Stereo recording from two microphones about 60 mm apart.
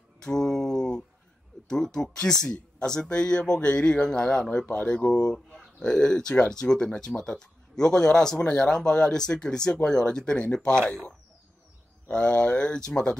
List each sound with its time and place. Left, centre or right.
0.2 s a sound: centre
1.7 s speech: centre
4.6 s speech: left
4.9 s speech: centre
12.1 s speech: centre